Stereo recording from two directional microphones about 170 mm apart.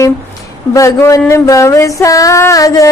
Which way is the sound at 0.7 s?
20° left (ahead or behind).